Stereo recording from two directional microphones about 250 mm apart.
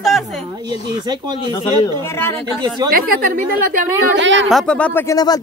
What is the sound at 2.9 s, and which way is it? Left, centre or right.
Speech, right.